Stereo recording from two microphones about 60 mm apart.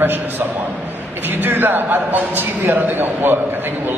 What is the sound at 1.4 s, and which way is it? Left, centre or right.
A man's voice, right.